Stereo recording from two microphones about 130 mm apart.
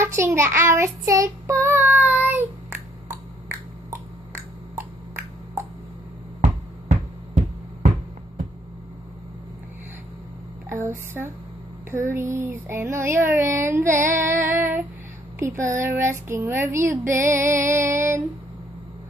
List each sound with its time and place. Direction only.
0.0 s child singing: 20° right (ahead or behind)
6.4 s a sound: 70° right (ahead or behind)
10.7 s a sound: 20° right (ahead or behind)
11.9 s speech: 20° right (ahead or behind)
13.9 s child singing: 20° right (ahead or behind)
15.3 s speech: 20° right (ahead or behind)